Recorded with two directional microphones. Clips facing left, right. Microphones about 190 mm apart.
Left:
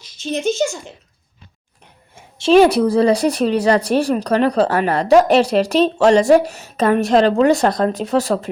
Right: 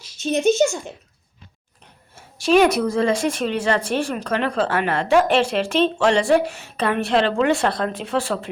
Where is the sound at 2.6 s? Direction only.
30° left (ahead or behind).